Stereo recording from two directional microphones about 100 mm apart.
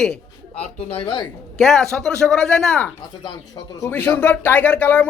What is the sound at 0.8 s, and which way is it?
Speech, 65° left (ahead or behind).